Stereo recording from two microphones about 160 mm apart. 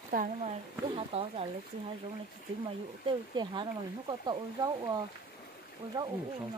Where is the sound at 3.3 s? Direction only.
30° right (ahead or behind).